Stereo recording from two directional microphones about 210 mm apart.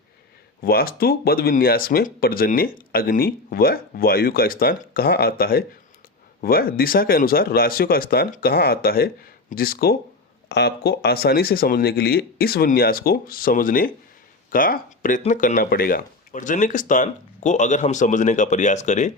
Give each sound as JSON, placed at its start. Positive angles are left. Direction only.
{"t": 0.6, "sound": "speech", "side_deg": 45}